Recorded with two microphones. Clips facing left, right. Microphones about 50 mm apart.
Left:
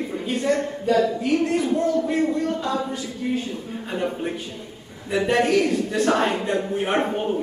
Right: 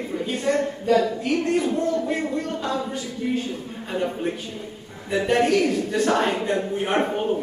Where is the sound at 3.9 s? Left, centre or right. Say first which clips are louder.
Right 1 dB; centre.